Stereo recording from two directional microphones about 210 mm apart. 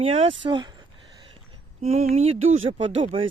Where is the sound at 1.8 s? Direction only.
30° right (ahead or behind).